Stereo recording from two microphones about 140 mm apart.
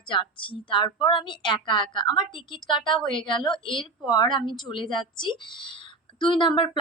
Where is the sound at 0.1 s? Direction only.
35° left (ahead or behind).